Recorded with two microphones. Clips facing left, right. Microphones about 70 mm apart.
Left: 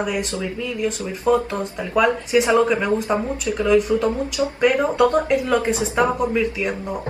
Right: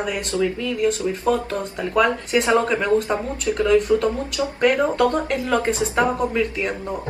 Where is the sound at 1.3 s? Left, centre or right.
Centre.